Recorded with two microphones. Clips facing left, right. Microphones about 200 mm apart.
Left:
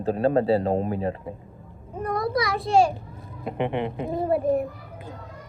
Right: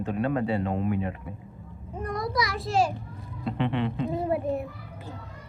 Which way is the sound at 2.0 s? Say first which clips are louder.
Left 4 dB; 55° left (ahead or behind).